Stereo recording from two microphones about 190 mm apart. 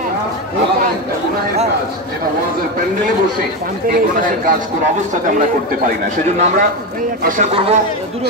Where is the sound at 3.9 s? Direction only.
45° right (ahead or behind).